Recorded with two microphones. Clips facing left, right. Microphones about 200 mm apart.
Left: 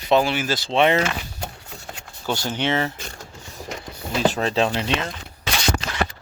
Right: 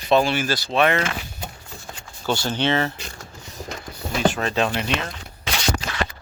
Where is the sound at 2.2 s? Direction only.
15° left (ahead or behind).